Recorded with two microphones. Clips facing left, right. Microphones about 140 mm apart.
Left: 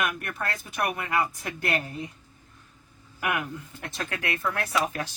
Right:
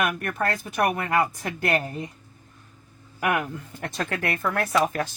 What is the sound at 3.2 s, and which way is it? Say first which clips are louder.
Speech: right 4 dB; 45° right (ahead or behind).